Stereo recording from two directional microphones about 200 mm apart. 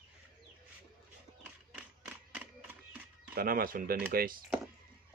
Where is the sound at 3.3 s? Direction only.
50° right (ahead or behind).